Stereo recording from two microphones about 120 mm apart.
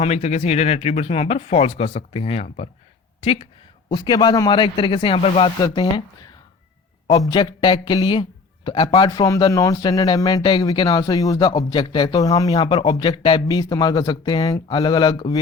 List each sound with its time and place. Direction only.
0.0 s speech: 65° left (ahead or behind)
3.8 s speech: 40° left (ahead or behind)
5.6 s speech: 40° left (ahead or behind)
7.1 s a man's voice: 35° left (ahead or behind)
9.0 s speech: 35° left (ahead or behind)